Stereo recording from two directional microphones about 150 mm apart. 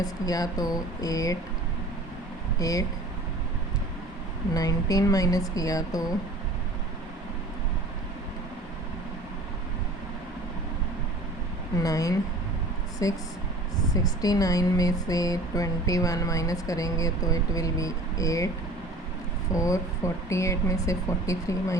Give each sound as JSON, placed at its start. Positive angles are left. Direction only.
{"t": 0.0, "sound": "speech", "side_deg": 25}
{"t": 2.6, "sound": "speech", "side_deg": 25}
{"t": 4.5, "sound": "speech", "side_deg": 25}
{"t": 11.8, "sound": "speech", "side_deg": 25}
{"t": 19.5, "sound": "speech", "side_deg": 20}